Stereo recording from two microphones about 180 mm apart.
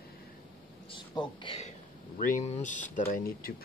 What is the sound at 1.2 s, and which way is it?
Speech, 30° left (ahead or behind).